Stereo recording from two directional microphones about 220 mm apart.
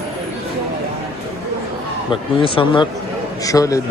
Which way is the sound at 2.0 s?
25° left (ahead or behind).